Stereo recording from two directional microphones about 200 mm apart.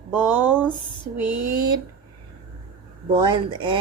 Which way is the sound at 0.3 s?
10° right (ahead or behind).